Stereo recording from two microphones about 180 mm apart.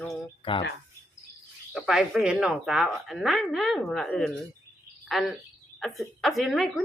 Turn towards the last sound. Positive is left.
turn(degrees=0)  # may be behind; listen again after turning